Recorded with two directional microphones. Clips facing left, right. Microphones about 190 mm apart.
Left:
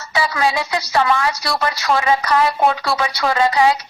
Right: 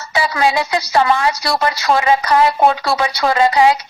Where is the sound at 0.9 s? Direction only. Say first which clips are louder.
Right 2 dB; 30° right (ahead or behind).